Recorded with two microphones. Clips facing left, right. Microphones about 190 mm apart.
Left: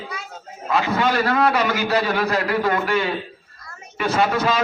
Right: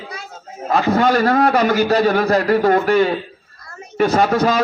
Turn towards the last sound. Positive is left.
turn(degrees=-40)  # may be behind; listen again after turning